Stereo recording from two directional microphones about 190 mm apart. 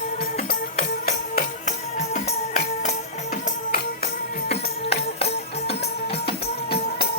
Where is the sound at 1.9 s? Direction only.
40° left (ahead or behind).